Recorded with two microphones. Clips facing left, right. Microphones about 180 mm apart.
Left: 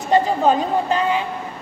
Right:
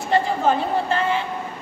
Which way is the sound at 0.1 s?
15° left (ahead or behind).